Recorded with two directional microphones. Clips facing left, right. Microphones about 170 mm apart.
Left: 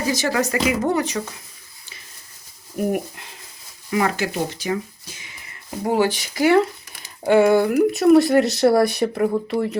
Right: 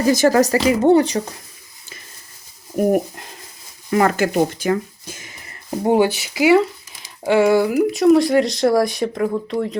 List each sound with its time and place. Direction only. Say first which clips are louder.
0.1 s speech: right 8 dB; 45° right (ahead or behind)
2.7 s speech: right 6 dB; 40° right (ahead or behind)
5.8 s speech: right 4 dB; 20° right (ahead or behind)
6.1 s speech: right 3 dB; 10° right (ahead or behind); by 9.7 s 10° left (ahead or behind)